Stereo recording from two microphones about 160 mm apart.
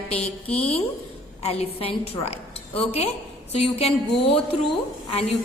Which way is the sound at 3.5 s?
40° left (ahead or behind).